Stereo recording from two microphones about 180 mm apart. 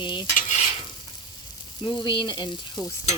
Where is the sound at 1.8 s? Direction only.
25° left (ahead or behind).